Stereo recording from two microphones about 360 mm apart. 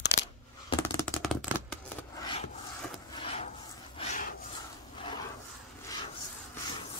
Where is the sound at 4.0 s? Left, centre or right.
Centre.